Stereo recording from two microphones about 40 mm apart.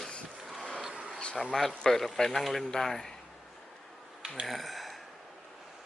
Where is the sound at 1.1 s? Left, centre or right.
Left.